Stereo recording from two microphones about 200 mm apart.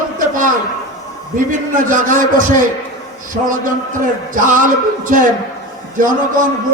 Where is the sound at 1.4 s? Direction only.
40° right (ahead or behind).